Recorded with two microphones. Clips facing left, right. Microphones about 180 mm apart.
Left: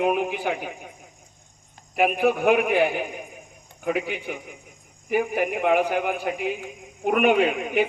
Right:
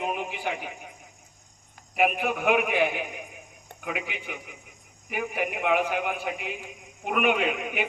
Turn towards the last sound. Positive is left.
turn(degrees=40)  # may be behind; listen again after turning